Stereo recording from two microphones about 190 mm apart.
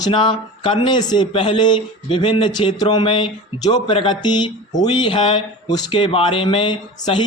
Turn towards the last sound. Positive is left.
turn(degrees=25)  # may be behind; listen again after turning